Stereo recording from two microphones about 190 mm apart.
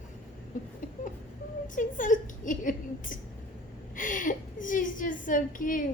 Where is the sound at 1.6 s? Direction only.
45° left (ahead or behind).